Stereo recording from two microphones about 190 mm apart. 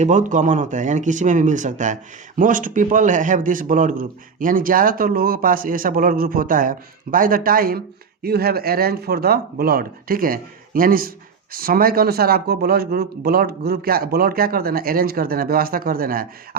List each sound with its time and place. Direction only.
0.0 s speech: 40° right (ahead or behind)